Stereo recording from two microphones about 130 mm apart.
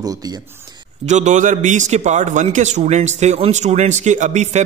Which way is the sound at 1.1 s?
65° right (ahead or behind).